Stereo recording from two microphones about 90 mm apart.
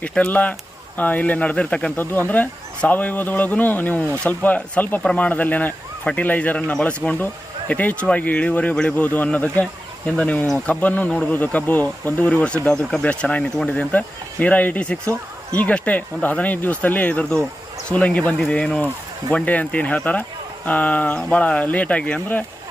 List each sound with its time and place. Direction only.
0.1 s speech: 15° left (ahead or behind)